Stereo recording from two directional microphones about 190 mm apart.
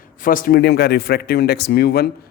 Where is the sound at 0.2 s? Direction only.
45° left (ahead or behind).